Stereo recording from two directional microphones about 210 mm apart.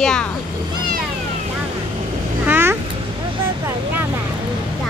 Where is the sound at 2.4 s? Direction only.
10° right (ahead or behind).